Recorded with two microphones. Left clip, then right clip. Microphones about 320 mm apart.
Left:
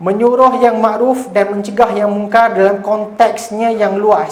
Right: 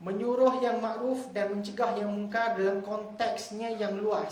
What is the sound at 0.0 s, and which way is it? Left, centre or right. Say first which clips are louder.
Speech: left 16 dB; centre.